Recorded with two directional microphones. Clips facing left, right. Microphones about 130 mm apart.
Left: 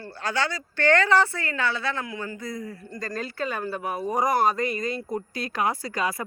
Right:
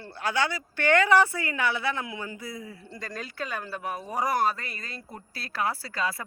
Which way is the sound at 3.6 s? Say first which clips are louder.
Left 5 dB; 45° left (ahead or behind).